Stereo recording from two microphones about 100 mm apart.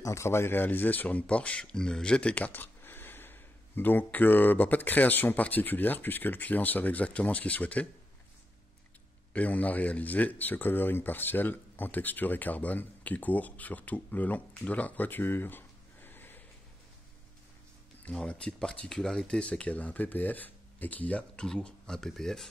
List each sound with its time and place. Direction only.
0.0 s speech: 30° left (ahead or behind)
9.3 s speech: 15° left (ahead or behind)
18.1 s speech: 10° left (ahead or behind)